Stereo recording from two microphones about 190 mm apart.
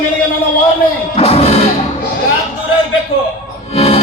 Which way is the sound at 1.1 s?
30° left (ahead or behind).